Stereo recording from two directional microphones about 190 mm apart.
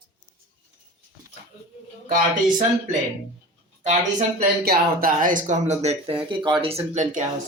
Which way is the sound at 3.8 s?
40° right (ahead or behind).